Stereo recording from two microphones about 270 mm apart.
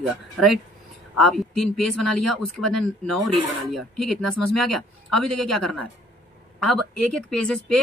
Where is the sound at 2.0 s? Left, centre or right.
Left.